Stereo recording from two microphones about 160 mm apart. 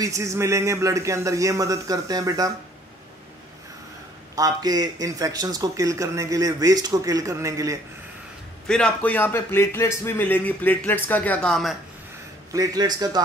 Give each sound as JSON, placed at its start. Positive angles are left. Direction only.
{"t": 0.0, "sound": "speech", "side_deg": -20}
{"t": 4.4, "sound": "speech", "side_deg": -25}
{"t": 8.6, "sound": "a man's voice", "side_deg": 5}
{"t": 12.5, "sound": "speech", "side_deg": -25}